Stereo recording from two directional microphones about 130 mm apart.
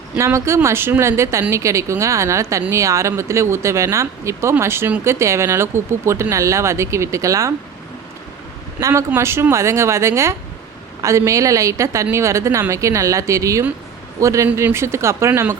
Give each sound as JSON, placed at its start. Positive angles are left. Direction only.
{"t": 0.2, "sound": "speech", "side_deg": -20}
{"t": 8.8, "sound": "speech", "side_deg": -25}